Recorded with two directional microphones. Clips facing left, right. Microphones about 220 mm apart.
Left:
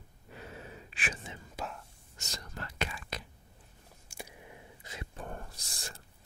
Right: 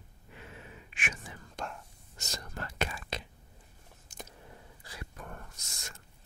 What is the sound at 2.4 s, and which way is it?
Whispering, 50° right (ahead or behind).